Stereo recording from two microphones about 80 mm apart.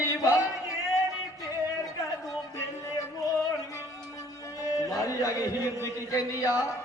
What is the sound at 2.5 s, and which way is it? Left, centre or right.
Music, left.